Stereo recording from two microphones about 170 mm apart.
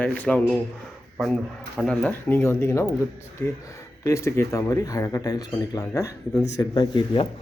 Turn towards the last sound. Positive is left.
turn(degrees=25)  # may be behind; listen again after turning